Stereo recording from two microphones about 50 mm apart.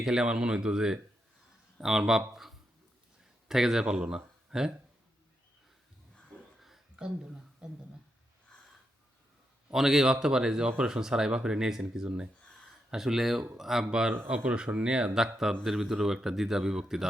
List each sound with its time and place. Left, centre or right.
0.0 s speech: centre
6.6 s a sound: centre
6.9 s a sound: centre
9.7 s speech: centre
12.9 s speech: centre
14.3 s speech: right